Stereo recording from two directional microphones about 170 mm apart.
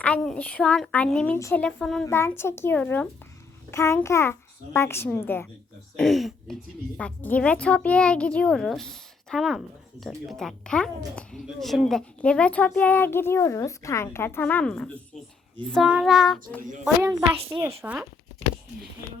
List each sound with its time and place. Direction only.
0.0 s a woman's voice: 5° left (ahead or behind)
1.4 s a woman's voice: 15° left (ahead or behind)
1.6 s a woman's voice: 5° left (ahead or behind)
2.0 s a woman's voice: 15° left (ahead or behind)
6.0 s a woman's voice: centre (ahead or behind)
17.0 s a child's voice: 20° right (ahead or behind)
17.8 s a sound: 10° right (ahead or behind)